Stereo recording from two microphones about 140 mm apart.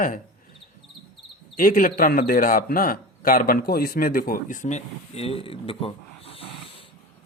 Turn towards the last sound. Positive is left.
turn(degrees=40)  # may be behind; listen again after turning